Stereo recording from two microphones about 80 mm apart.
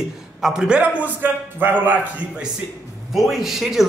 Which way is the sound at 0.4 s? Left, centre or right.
Centre.